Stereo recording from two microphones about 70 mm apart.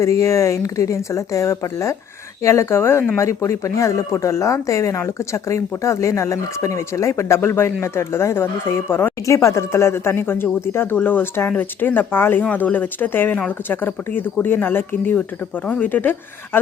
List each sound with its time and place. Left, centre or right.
0.0 s speech: left
9.2 s speech: left